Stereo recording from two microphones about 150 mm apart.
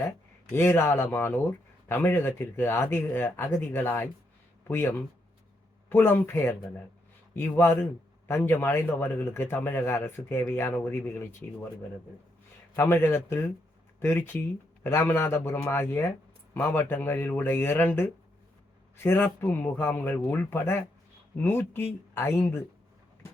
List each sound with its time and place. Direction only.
0.5 s speech: 15° left (ahead or behind)
12.7 s speech: 15° left (ahead or behind)